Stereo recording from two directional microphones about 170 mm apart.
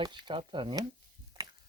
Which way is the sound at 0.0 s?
25° right (ahead or behind).